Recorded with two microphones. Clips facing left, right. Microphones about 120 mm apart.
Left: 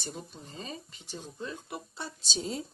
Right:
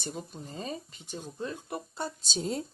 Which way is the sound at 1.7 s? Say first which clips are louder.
Right 5 dB; 50° right (ahead or behind).